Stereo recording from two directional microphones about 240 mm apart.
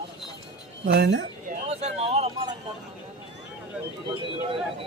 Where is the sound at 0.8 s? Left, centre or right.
Right.